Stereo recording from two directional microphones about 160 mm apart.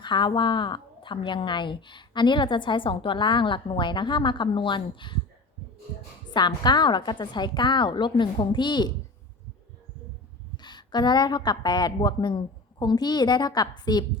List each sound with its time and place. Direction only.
0.0 s a woman's voice: 30° left (ahead or behind)
6.3 s a woman's voice: 30° left (ahead or behind)
10.6 s a woman's voice: 25° left (ahead or behind)